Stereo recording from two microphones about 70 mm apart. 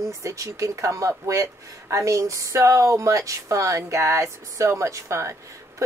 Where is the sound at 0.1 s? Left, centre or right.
Right.